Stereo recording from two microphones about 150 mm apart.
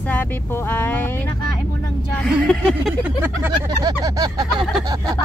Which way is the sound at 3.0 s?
15° right (ahead or behind).